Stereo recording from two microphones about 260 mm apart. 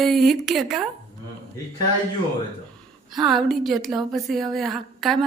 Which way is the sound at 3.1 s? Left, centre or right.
Centre.